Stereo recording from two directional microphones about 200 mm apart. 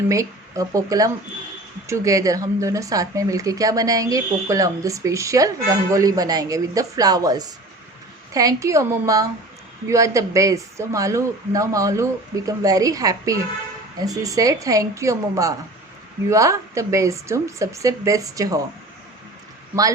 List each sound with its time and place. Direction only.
0.1 s speech: 15° right (ahead or behind)
19.7 s speech: 10° right (ahead or behind)